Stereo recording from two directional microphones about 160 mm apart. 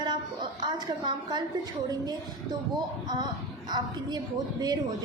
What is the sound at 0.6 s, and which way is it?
Speech, 25° right (ahead or behind).